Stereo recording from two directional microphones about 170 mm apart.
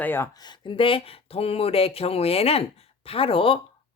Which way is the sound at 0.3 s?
25° left (ahead or behind).